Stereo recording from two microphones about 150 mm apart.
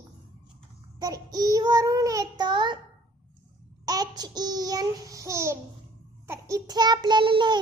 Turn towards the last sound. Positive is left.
turn(degrees=-30)  # may be behind; listen again after turning